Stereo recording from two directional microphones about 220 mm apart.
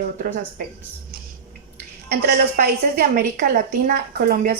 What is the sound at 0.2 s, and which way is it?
Speech, 40° right (ahead or behind).